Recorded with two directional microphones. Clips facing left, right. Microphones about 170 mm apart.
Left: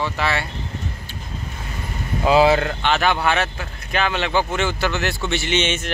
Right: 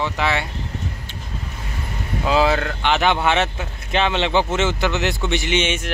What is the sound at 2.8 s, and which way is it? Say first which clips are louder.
Speech: right 2 dB; 20° right (ahead or behind).